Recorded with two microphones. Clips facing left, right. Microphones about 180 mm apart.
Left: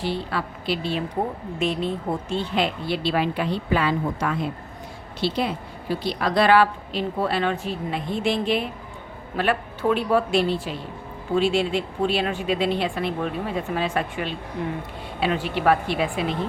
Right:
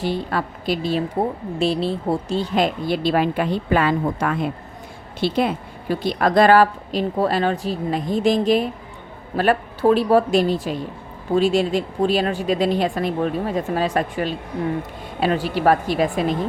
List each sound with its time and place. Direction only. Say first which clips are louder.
0.0 s a woman's voice: right 4 dB; 45° right (ahead or behind)